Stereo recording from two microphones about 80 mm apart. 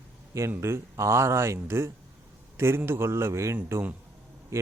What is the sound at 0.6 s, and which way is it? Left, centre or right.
A man's voice, right.